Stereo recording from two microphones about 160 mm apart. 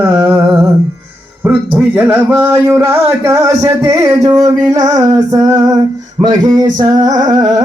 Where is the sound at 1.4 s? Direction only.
10° right (ahead or behind).